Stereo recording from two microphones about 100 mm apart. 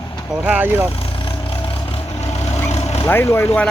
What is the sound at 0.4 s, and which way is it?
Speech, 15° right (ahead or behind).